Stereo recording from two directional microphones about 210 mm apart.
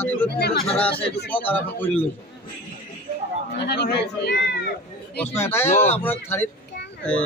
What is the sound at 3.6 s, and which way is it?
Speech, 50° left (ahead or behind).